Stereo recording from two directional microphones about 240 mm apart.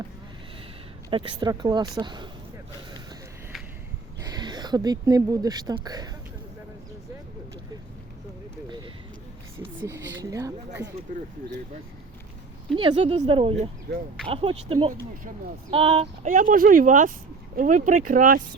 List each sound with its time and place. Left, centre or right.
1.1 s speech: centre
4.2 s speech: centre
9.8 s speech: centre
12.7 s speech: right